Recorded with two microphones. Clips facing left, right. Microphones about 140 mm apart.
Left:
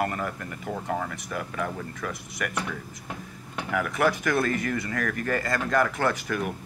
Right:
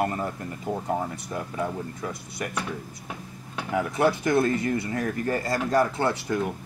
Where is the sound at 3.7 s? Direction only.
25° right (ahead or behind).